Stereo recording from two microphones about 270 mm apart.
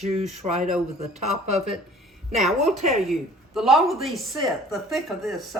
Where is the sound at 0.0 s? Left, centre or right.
Right.